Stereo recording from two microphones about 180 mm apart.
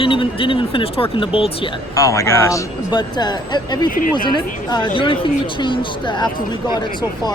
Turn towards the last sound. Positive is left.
turn(degrees=25)  # may be behind; listen again after turning